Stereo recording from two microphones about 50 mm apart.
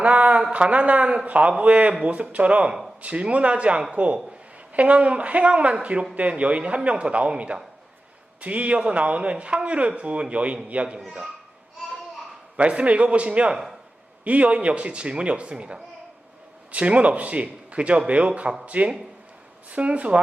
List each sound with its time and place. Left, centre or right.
0.0 s speech: right
11.0 s a man's voice: centre
12.5 s speech: right
13.5 s speech: centre
14.3 s speech: right